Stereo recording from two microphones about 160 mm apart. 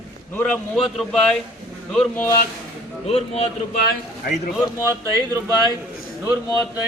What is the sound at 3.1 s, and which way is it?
Speech, 40° left (ahead or behind).